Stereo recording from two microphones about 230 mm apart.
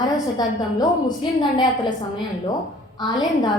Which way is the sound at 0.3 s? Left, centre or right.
Centre.